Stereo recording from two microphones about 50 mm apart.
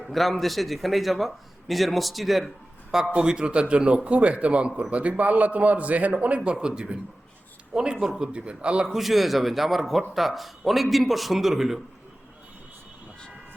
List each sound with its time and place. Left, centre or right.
0.0 s a man's voice: centre
3.2 s a man's voice: centre
8.9 s a man's voice: centre